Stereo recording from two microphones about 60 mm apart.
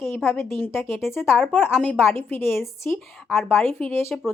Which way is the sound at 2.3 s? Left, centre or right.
Left.